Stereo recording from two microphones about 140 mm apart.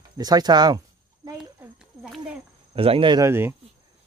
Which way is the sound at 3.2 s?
15° right (ahead or behind).